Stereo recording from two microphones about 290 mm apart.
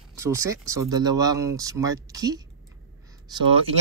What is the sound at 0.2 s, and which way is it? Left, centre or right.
Speech, centre.